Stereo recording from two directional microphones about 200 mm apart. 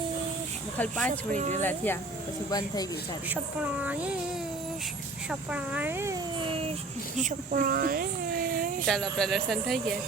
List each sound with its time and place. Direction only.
0.8 s speech: 5° left (ahead or behind)
1.3 s speech: 35° right (ahead or behind)
1.6 s speech: 10° left (ahead or behind)
3.8 s speech: 5° right (ahead or behind)
5.3 s speech: 5° right (ahead or behind)
6.4 s a sound: 30° right (ahead or behind)
7.2 s speech: 40° right (ahead or behind)
8.9 s speech: centre (ahead or behind)